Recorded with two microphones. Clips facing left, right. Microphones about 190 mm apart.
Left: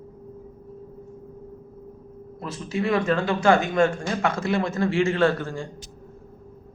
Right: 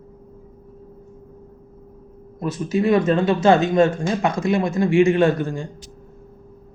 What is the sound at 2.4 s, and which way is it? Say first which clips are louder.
Speech: right 6 dB; 20° right (ahead or behind).